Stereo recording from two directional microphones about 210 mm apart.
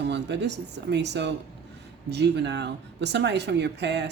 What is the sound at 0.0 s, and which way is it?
Speech, 55° right (ahead or behind).